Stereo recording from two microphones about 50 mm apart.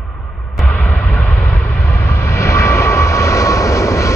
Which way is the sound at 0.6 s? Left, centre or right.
Left.